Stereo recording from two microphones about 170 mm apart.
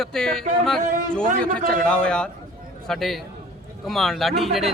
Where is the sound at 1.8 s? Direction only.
5° left (ahead or behind).